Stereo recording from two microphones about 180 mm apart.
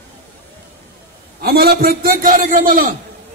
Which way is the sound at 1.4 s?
60° right (ahead or behind).